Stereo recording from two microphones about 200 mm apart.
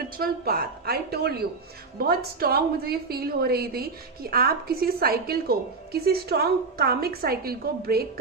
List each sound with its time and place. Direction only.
0.2 s a woman's voice: 50° right (ahead or behind)